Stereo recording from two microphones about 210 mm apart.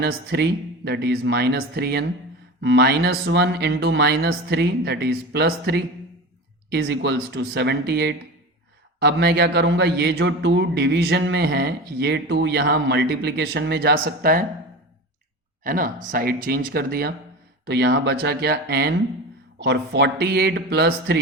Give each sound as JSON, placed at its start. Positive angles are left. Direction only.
{"t": 0.0, "sound": "a man's voice", "side_deg": -50}
{"t": 15.6, "sound": "a man's voice", "side_deg": -40}